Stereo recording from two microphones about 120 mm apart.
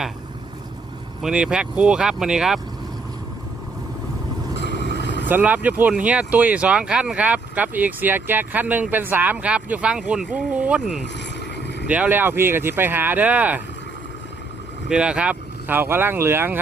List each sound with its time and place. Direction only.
1.2 s speech: 5° right (ahead or behind)
5.3 s speech: 15° right (ahead or behind)
11.9 s speech: 15° right (ahead or behind)
14.8 s speech: 10° right (ahead or behind)